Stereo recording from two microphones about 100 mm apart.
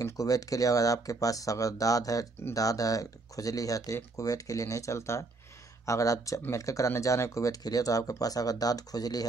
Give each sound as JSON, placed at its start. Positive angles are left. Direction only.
{"t": 0.0, "sound": "speech", "side_deg": 35}